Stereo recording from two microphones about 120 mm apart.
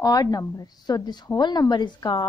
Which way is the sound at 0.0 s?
30° left (ahead or behind).